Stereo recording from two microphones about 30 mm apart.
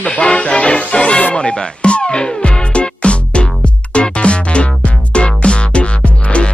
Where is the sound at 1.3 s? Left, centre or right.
Left.